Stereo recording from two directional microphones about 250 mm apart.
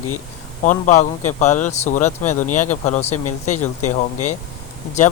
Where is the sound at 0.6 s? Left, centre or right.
Left.